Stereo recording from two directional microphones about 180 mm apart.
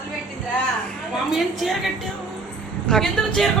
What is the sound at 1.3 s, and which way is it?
Speech, centre (ahead or behind).